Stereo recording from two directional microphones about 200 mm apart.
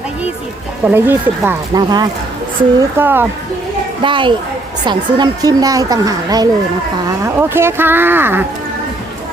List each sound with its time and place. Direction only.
0.9 s speech: 10° right (ahead or behind)
4.0 s speech: 25° right (ahead or behind)